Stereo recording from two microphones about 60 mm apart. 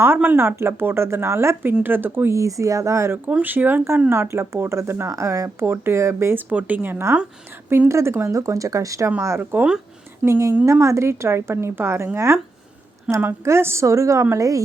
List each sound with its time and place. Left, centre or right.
0.0 s speech: right
1.8 s speech: right
2.3 s speech: right
3.4 s speech: right
4.1 s speech: right
5.1 s speech: right
5.5 s speech: right
6.3 s speech: right
7.9 s speech: right
9.4 s speech: right
10.2 s speech: right
13.1 s speech: right
13.4 s speech: right
14.3 s a woman's voice: right